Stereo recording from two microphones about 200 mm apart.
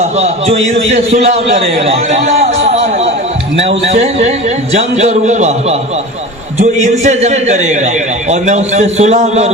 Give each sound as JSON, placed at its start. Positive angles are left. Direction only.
{"t": 0.0, "sound": "a man's voice", "side_deg": -30}